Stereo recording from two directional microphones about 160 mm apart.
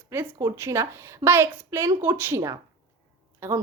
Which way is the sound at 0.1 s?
15° right (ahead or behind).